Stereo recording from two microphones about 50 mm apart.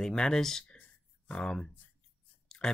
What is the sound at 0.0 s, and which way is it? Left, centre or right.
Speech, centre.